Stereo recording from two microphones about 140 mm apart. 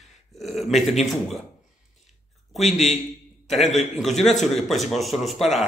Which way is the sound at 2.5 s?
Centre (ahead or behind).